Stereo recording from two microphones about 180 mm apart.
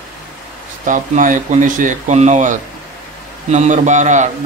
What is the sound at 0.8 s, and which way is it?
A man's voice, 45° right (ahead or behind).